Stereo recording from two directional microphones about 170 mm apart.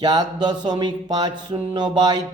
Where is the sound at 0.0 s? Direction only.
25° right (ahead or behind).